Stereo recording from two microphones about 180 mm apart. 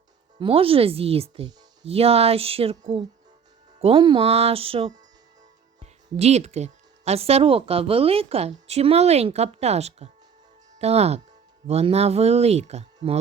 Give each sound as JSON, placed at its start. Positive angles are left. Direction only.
{"t": 0.3, "sound": "speech", "side_deg": -30}